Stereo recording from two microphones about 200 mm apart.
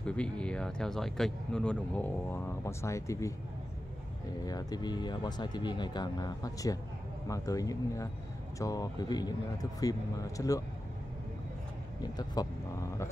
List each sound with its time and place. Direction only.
0.0 s speech: 5° left (ahead or behind)
4.5 s speech: 20° left (ahead or behind)
12.0 s speech: 20° left (ahead or behind)